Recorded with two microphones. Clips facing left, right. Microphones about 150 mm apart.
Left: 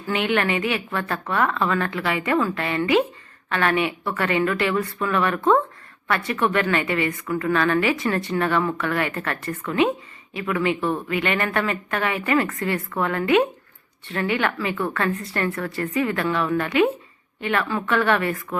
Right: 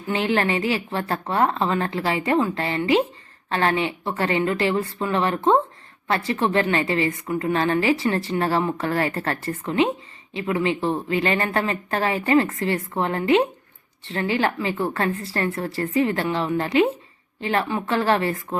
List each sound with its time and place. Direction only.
0.1 s a woman's voice: 30° right (ahead or behind)